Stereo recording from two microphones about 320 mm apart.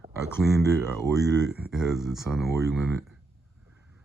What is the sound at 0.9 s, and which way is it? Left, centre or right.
Speech, centre.